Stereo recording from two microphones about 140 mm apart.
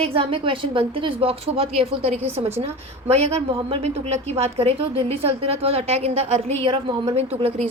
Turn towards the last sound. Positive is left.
turn(degrees=-50)  # may be behind; listen again after turning